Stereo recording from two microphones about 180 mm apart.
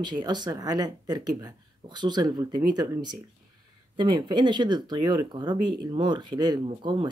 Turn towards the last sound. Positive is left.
turn(degrees=-25)  # may be behind; listen again after turning